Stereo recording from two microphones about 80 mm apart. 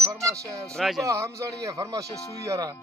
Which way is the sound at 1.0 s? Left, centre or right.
Right.